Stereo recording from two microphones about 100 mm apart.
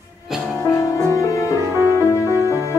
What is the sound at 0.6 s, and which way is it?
Music, 30° left (ahead or behind).